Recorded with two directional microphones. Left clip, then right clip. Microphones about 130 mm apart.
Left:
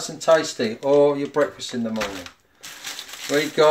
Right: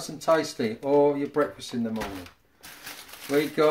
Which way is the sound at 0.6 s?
20° left (ahead or behind).